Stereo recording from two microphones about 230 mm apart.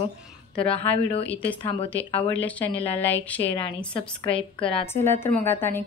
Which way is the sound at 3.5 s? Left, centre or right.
Left.